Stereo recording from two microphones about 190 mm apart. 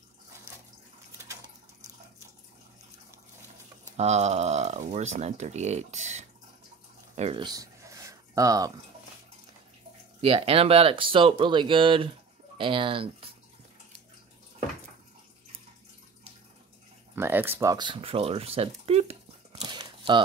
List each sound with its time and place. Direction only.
3.9 s speech: 35° right (ahead or behind)
7.4 s a sound: 20° right (ahead or behind)
10.2 s speech: 30° right (ahead or behind)
17.1 s speech: 10° right (ahead or behind)